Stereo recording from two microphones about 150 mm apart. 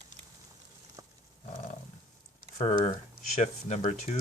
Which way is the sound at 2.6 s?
45° left (ahead or behind).